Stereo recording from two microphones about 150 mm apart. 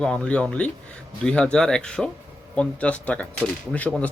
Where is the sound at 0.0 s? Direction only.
5° left (ahead or behind).